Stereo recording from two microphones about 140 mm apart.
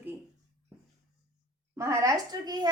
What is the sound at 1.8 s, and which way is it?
Speech, 20° right (ahead or behind).